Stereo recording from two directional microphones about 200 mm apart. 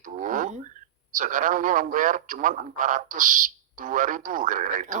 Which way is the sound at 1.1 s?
40° right (ahead or behind).